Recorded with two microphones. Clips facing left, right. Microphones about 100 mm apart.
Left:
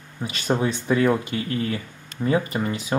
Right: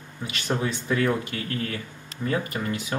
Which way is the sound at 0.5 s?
20° left (ahead or behind).